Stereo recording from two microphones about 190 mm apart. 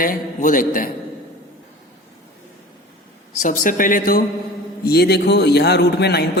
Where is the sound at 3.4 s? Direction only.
45° left (ahead or behind).